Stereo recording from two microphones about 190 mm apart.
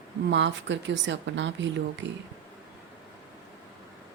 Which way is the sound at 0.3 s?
70° right (ahead or behind).